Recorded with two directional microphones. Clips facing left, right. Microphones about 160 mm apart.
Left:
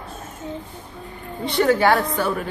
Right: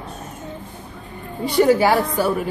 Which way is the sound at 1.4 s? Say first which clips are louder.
Right 3 dB; 10° right (ahead or behind).